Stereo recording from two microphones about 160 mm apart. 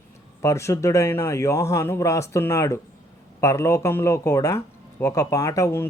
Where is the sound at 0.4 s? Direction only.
20° left (ahead or behind).